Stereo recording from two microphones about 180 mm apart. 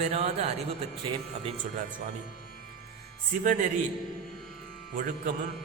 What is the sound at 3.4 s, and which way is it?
Speech, 45° right (ahead or behind).